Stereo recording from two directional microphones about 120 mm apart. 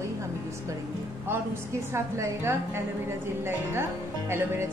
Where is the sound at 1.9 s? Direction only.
20° right (ahead or behind).